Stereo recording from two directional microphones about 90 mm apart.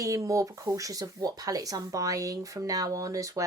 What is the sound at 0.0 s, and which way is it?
Speech, 35° right (ahead or behind).